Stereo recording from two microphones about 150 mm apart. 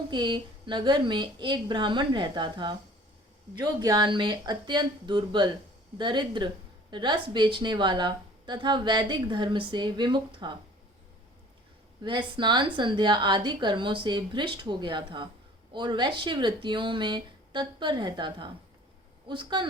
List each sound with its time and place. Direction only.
0.1 s a woman's voice: 30° right (ahead or behind)
12.0 s a woman's voice: 30° right (ahead or behind)